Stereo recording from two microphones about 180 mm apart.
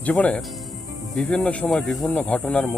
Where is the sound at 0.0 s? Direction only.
10° left (ahead or behind).